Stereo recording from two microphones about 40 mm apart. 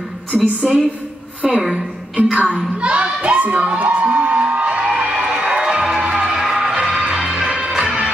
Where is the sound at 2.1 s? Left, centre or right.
Right.